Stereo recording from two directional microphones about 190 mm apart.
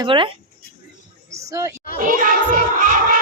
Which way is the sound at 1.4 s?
15° right (ahead or behind).